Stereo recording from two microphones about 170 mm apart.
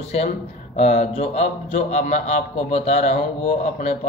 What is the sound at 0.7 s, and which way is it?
A man's voice, 40° left (ahead or behind).